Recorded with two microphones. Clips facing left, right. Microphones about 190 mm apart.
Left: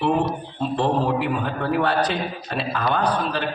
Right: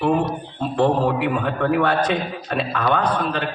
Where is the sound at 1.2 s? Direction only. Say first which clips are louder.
Right 3 dB; 60° right (ahead or behind).